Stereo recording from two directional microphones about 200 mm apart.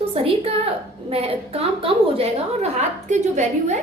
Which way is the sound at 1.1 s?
30° right (ahead or behind).